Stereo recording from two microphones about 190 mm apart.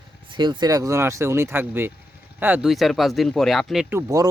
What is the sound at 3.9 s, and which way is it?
Speech, 15° right (ahead or behind).